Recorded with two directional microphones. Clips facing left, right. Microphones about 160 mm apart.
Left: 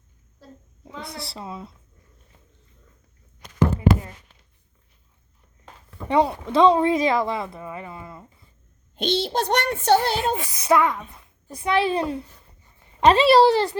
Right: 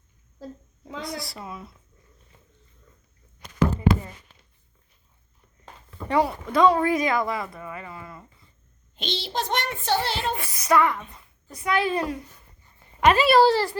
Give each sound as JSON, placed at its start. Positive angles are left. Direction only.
{"t": 1.2, "sound": "speech", "side_deg": 30}
{"t": 6.1, "sound": "speech", "side_deg": 25}
{"t": 9.0, "sound": "a child's voice", "side_deg": 50}
{"t": 10.3, "sound": "speech", "side_deg": 20}
{"t": 11.5, "sound": "speech", "side_deg": 30}